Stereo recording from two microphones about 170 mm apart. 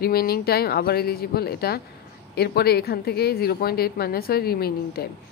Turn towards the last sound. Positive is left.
turn(degrees=65)  # may be behind; listen again after turning